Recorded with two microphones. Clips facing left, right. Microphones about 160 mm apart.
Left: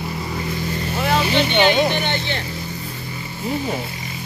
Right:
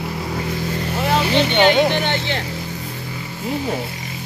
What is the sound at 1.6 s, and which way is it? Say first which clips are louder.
Speech: right 3 dB; 70° right (ahead or behind).